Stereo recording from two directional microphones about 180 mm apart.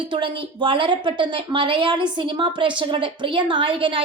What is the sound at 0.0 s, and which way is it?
A woman's voice, 30° right (ahead or behind).